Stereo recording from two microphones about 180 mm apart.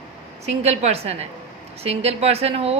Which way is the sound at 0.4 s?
35° right (ahead or behind).